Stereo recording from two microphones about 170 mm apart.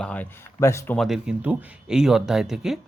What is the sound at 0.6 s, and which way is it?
Speech, 15° left (ahead or behind).